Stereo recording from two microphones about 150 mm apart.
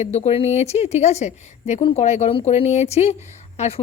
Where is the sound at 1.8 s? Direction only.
40° left (ahead or behind).